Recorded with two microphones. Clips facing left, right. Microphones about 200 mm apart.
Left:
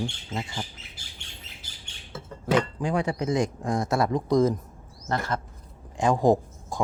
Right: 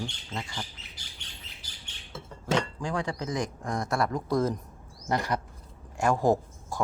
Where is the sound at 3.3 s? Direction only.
25° left (ahead or behind).